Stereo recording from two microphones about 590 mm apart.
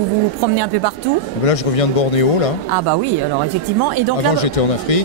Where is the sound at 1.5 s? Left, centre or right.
Left.